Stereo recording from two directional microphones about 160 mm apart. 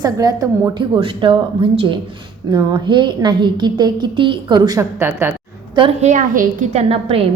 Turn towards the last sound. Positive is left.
turn(degrees=-40)  # may be behind; listen again after turning